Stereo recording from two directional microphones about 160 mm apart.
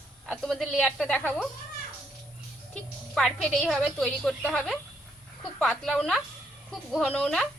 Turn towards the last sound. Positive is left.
turn(degrees=5)  # may be behind; listen again after turning